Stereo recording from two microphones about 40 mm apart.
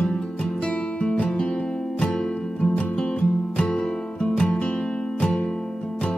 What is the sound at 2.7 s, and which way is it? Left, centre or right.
Music, left.